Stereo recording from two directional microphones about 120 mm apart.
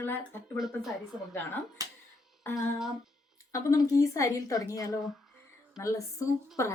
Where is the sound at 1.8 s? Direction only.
30° right (ahead or behind).